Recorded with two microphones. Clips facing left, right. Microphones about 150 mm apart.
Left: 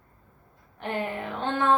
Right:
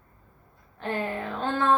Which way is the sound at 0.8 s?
15° left (ahead or behind).